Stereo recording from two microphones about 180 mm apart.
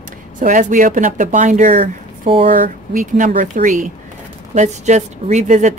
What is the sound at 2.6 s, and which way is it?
Speech, 45° right (ahead or behind).